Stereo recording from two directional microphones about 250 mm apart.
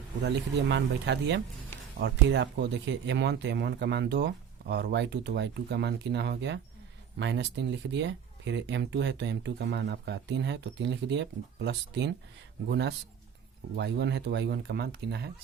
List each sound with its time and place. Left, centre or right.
0.2 s speech: right
13.7 s speech: right